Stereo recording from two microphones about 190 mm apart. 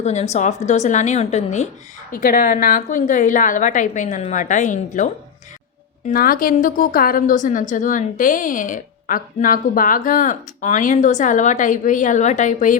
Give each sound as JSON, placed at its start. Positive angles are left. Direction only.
{"t": 0.0, "sound": "a woman's voice", "side_deg": 35}
{"t": 2.1, "sound": "a woman's voice", "side_deg": 45}
{"t": 6.1, "sound": "a woman's voice", "side_deg": 50}